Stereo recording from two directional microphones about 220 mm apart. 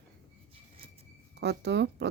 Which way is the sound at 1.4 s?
50° right (ahead or behind).